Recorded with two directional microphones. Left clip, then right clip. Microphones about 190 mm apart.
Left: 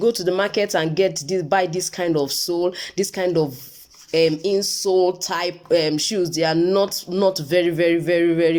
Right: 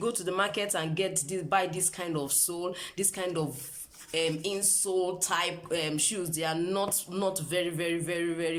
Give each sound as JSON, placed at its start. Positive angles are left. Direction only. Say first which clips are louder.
{"t": 0.0, "sound": "speech", "louder": "left 10 dB", "side_deg": 30}